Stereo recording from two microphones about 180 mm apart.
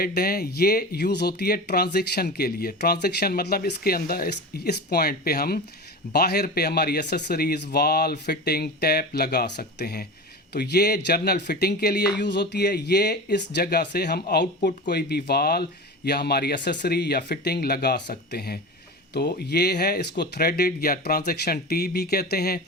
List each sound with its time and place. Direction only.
0.0 s speech: 55° left (ahead or behind)